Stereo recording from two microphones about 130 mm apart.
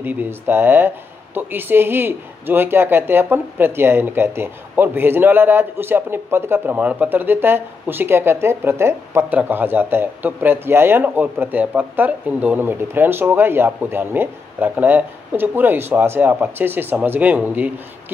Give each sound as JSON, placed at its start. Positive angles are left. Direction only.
{"t": 0.0, "sound": "speech", "side_deg": -15}